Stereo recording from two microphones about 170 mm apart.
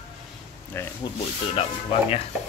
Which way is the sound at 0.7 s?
15° left (ahead or behind).